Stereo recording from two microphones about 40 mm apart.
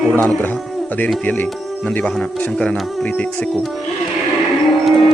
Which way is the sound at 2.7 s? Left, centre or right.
Left.